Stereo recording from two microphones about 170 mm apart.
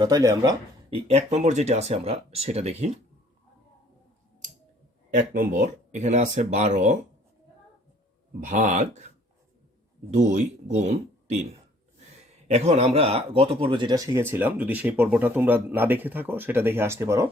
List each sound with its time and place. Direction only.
0.0 s speech: 20° right (ahead or behind)
0.9 s speech: 35° right (ahead or behind)
5.3 s speech: 50° right (ahead or behind)
8.4 s speech: 45° right (ahead or behind)
10.1 s speech: 45° right (ahead or behind)
12.5 s speech: 40° right (ahead or behind); by 17.2 s 15° right (ahead or behind)